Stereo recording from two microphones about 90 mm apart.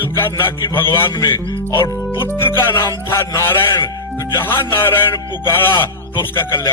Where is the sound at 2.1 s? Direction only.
25° left (ahead or behind).